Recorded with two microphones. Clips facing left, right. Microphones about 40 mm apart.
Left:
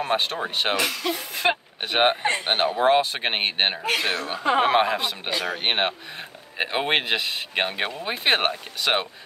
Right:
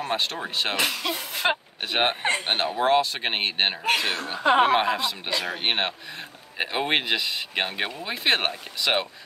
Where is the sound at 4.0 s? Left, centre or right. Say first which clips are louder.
Left 2 dB; left.